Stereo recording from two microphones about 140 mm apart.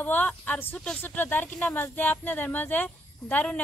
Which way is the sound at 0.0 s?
10° left (ahead or behind).